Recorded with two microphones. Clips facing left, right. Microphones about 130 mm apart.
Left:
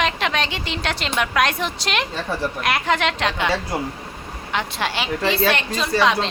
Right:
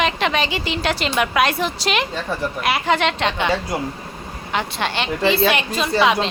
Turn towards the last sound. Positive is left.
turn(degrees=-5)  # may be behind; listen again after turning